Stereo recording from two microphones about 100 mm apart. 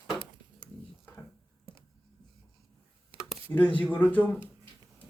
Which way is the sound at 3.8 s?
15° left (ahead or behind).